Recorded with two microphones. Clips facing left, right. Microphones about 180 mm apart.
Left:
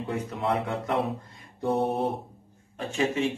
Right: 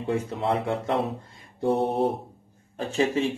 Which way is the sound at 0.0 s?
30° right (ahead or behind).